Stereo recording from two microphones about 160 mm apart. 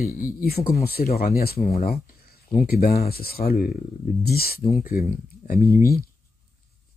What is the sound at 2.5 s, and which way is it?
Speech, 70° left (ahead or behind).